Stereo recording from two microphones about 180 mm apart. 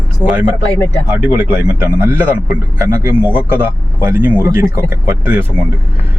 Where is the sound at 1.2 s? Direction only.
10° right (ahead or behind).